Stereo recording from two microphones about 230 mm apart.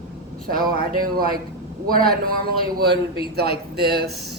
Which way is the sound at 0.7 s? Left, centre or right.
Right.